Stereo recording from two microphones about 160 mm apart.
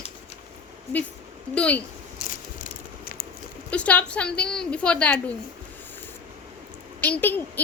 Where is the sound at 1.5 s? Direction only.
10° left (ahead or behind).